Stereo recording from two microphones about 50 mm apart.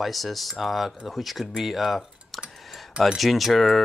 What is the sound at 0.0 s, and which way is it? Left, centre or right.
Speech, centre.